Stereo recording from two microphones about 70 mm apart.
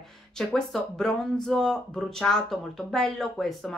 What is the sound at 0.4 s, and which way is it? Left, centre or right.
Speech, centre.